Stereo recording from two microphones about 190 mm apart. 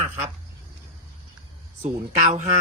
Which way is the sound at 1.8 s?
40° right (ahead or behind).